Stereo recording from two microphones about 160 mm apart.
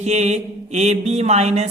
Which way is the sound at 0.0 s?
45° right (ahead or behind).